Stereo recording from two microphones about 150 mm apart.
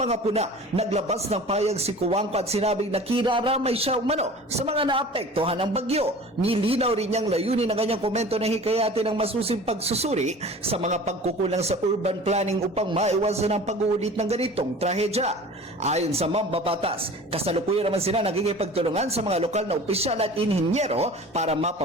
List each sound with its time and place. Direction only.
0.0 s a man's voice: 45° right (ahead or behind)